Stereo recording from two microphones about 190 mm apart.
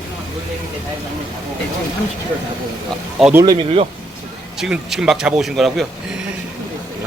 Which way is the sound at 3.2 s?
10° right (ahead or behind).